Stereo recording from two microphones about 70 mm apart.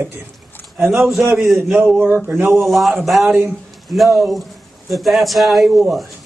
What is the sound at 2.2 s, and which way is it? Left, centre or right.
Speech, right.